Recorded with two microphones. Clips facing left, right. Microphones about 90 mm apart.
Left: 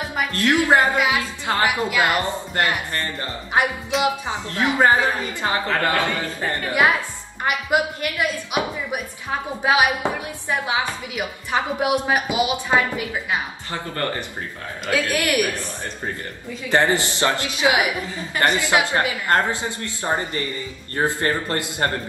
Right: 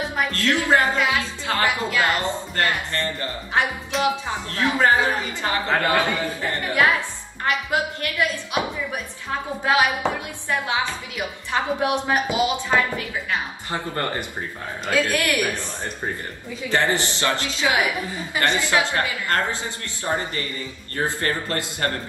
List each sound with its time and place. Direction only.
0.1 s a woman's voice: 15° left (ahead or behind)
3.9 s speech: centre (ahead or behind)
4.3 s a woman's voice: 20° left (ahead or behind)
5.7 s a woman's voice: 20° right (ahead or behind)
6.4 s speech: 15° left (ahead or behind)
13.7 s a woman's voice: 25° right (ahead or behind)
14.9 s speech: 15° left (ahead or behind)
16.6 s a woman's voice: 20° left (ahead or behind)
18.0 s a woman's voice: 15° right (ahead or behind)
18.4 s a woman's voice: 20° left (ahead or behind)